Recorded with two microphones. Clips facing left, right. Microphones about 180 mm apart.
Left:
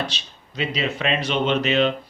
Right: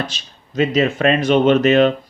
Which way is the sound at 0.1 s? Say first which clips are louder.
Right 4 dB; 45° right (ahead or behind).